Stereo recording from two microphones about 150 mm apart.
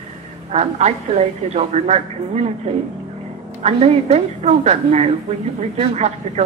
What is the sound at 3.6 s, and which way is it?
Speech, 45° right (ahead or behind).